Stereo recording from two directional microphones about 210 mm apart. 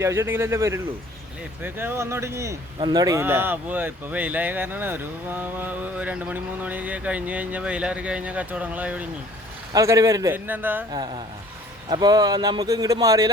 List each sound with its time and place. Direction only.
0.0 s speech: 10° right (ahead or behind)
10.9 s speech: 20° right (ahead or behind)